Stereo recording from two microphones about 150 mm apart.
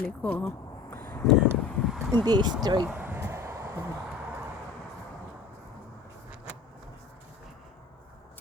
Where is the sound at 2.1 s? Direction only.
25° right (ahead or behind).